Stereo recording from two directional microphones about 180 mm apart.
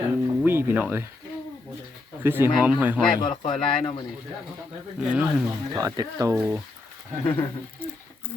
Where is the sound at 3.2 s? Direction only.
25° left (ahead or behind).